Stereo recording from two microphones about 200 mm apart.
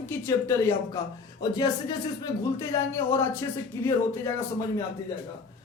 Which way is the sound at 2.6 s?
15° left (ahead or behind).